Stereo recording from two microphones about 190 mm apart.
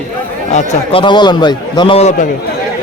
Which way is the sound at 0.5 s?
30° left (ahead or behind).